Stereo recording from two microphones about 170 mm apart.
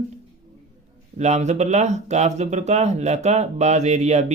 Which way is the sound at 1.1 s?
40° right (ahead or behind).